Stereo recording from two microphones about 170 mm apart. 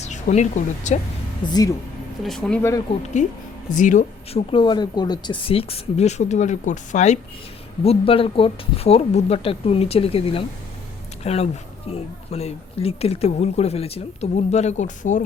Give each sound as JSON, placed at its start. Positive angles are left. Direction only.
{"t": 0.0, "sound": "speech", "side_deg": 45}
{"t": 1.4, "sound": "speech", "side_deg": 25}
{"t": 2.2, "sound": "speech", "side_deg": 5}
{"t": 2.6, "sound": "speech", "side_deg": 15}
{"t": 3.2, "sound": "a woman's voice", "side_deg": 45}
{"t": 7.9, "sound": "speech", "side_deg": 30}